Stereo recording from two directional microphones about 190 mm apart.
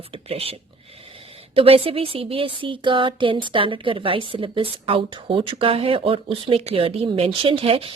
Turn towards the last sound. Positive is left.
turn(degrees=-30)  # may be behind; listen again after turning